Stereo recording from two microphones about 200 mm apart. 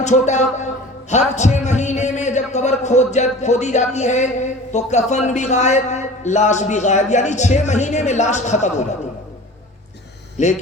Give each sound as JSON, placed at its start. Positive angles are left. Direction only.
{"t": 0.0, "sound": "speech", "side_deg": 35}
{"t": 10.4, "sound": "speech", "side_deg": 35}